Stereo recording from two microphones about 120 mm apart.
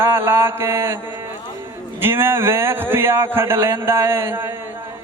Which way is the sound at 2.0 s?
20° right (ahead or behind).